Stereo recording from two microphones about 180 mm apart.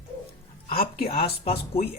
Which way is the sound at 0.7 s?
30° left (ahead or behind).